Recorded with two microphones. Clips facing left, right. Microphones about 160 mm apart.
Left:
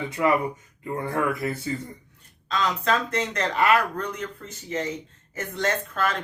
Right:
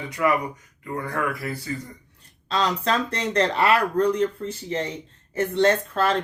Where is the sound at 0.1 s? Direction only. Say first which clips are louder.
Even; 25° left (ahead or behind).